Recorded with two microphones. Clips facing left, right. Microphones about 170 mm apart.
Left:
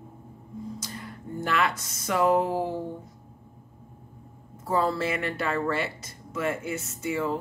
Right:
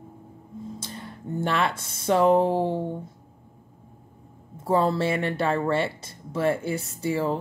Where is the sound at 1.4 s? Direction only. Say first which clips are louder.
Right 1 dB; 30° right (ahead or behind).